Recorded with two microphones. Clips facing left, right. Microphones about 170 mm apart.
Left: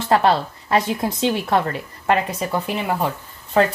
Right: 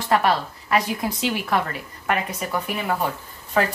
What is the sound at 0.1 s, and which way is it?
A woman's voice, 25° left (ahead or behind).